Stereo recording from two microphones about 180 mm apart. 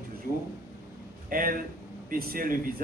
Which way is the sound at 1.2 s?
50° right (ahead or behind).